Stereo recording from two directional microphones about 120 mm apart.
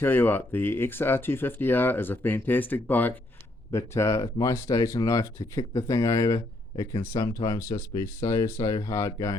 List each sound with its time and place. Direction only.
0.0 s speech: 15° left (ahead or behind)